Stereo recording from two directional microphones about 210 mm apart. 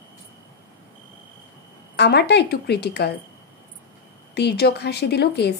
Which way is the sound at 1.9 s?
50° left (ahead or behind).